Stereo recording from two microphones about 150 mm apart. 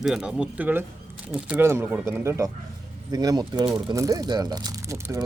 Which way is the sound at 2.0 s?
20° right (ahead or behind).